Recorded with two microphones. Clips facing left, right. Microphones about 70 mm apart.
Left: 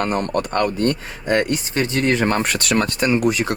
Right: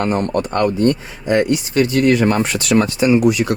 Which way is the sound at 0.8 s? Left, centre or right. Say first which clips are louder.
Right 4 dB; left.